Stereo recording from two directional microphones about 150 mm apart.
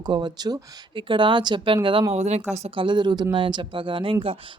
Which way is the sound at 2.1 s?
50° right (ahead or behind).